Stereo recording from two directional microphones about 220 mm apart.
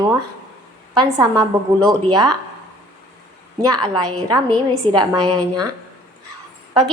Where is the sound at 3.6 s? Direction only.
20° right (ahead or behind).